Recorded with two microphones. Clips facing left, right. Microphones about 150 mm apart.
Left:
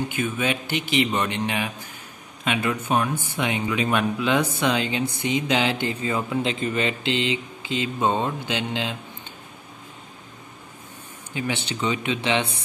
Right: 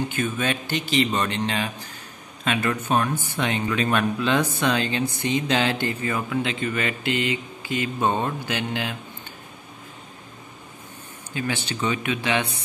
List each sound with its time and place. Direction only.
0.1 s speech: 15° left (ahead or behind)
6.4 s speech: 35° left (ahead or behind)
11.3 s speech: 15° left (ahead or behind)